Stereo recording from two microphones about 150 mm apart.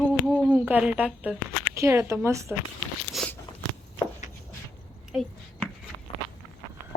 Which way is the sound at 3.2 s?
Centre (ahead or behind).